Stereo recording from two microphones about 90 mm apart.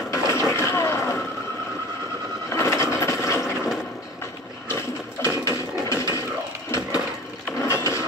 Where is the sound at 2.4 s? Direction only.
30° left (ahead or behind).